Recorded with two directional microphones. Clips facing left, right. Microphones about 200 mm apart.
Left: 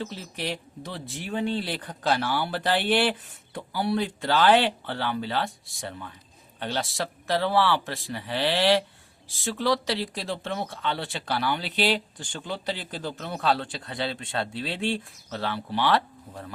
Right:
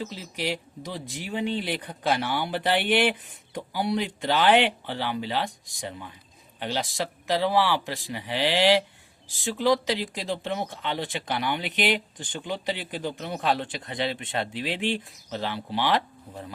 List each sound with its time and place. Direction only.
0.0 s speech: 10° right (ahead or behind)